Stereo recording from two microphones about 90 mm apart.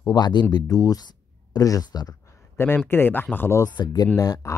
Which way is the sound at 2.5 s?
25° left (ahead or behind).